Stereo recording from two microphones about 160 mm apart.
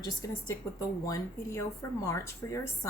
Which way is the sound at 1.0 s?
20° left (ahead or behind).